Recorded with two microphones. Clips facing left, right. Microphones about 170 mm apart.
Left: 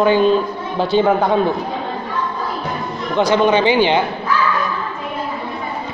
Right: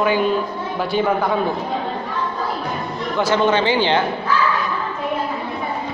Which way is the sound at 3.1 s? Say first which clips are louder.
Left 3 dB; 15° left (ahead or behind).